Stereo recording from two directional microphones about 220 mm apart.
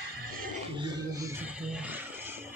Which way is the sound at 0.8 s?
15° right (ahead or behind).